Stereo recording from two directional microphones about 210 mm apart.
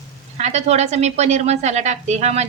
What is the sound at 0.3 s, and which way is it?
A woman's voice, 30° right (ahead or behind).